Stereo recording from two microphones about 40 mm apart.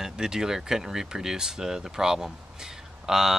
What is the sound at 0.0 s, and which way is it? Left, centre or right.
Speech, centre.